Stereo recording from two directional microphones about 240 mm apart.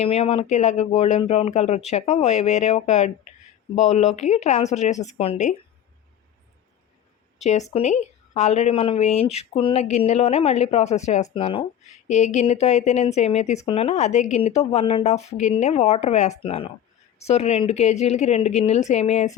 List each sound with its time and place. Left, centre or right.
0.0 s speech: left
7.3 s speech: left